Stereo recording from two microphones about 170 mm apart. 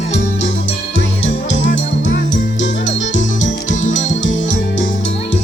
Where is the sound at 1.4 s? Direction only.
90° left.